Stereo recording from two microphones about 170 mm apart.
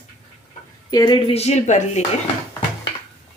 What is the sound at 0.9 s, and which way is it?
Speech, 25° left (ahead or behind).